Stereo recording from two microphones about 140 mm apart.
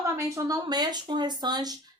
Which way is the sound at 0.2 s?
25° right (ahead or behind).